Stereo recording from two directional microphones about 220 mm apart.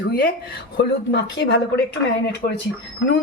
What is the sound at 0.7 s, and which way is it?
Speech, 50° left (ahead or behind).